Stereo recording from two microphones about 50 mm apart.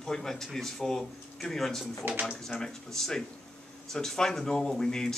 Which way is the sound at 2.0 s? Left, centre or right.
Right.